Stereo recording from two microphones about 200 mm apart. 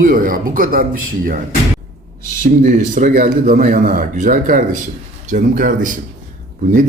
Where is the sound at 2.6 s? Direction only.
40° right (ahead or behind).